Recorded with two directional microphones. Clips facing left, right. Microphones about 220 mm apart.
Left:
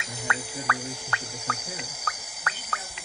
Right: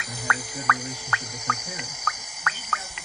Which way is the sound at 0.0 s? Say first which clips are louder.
Right 1 dB; 25° left (ahead or behind).